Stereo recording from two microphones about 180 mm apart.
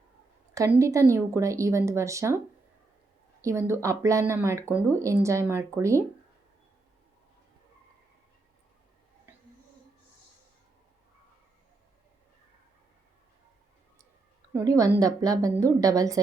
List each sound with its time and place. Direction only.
0.5 s speech: 15° right (ahead or behind)
3.4 s speech: 15° right (ahead or behind)
14.5 s a woman's voice: 20° right (ahead or behind)